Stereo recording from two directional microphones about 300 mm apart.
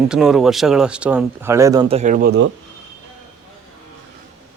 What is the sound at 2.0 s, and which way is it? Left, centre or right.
Speech, right.